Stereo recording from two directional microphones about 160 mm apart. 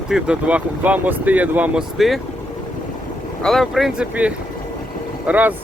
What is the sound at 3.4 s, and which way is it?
Speech, centre (ahead or behind).